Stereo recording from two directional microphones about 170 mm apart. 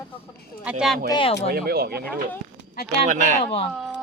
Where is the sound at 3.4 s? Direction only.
35° left (ahead or behind).